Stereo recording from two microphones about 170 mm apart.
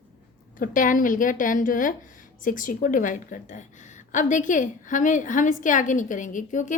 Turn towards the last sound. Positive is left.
turn(degrees=50)  # may be behind; listen again after turning